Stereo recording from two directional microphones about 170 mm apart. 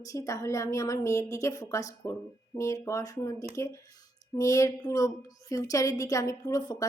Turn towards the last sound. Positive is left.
turn(degrees=20)  # may be behind; listen again after turning